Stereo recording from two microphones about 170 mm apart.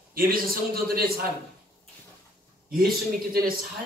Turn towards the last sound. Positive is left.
turn(degrees=-60)  # may be behind; listen again after turning